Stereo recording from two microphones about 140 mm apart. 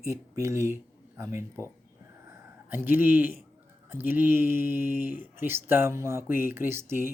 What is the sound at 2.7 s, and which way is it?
Speech, 15° right (ahead or behind).